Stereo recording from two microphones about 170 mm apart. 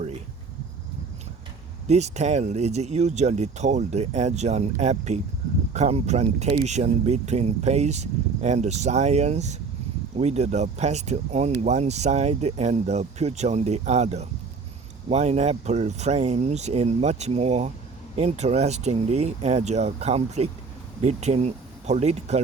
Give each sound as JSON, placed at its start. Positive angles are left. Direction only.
{"t": 1.9, "sound": "speech", "side_deg": -40}